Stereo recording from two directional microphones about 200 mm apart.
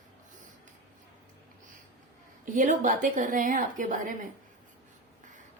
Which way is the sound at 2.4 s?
40° right (ahead or behind).